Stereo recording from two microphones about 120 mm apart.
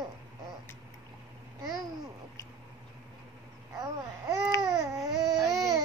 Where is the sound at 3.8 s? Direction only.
25° right (ahead or behind).